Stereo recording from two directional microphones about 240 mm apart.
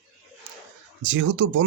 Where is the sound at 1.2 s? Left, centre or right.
Right.